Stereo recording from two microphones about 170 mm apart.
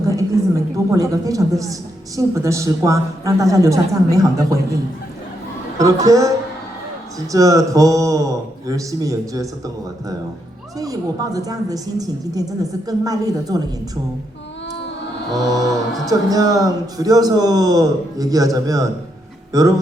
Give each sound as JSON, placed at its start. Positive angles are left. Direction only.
{"t": 0.2, "sound": "a man's voice", "side_deg": -20}
{"t": 5.7, "sound": "a woman's voice", "side_deg": -20}
{"t": 15.4, "sound": "a woman's voice", "side_deg": -20}